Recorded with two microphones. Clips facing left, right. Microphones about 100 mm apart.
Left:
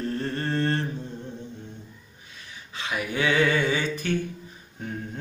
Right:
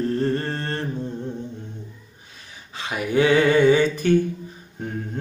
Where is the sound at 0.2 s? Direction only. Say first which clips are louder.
Right 3 dB; 40° right (ahead or behind).